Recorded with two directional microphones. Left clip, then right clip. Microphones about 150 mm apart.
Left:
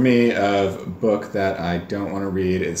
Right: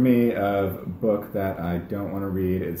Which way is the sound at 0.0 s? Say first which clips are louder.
Left 4 dB; 25° left (ahead or behind).